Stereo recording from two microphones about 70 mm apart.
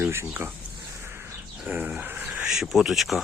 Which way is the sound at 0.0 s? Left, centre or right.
Right.